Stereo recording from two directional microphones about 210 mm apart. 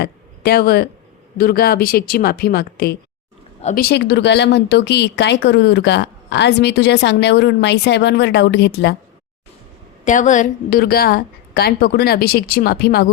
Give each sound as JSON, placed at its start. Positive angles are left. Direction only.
{"t": 0.0, "sound": "speech", "side_deg": 50}
{"t": 10.0, "sound": "speech", "side_deg": 35}